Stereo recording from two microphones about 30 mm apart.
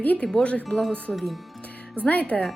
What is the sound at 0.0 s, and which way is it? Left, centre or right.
Speech, left.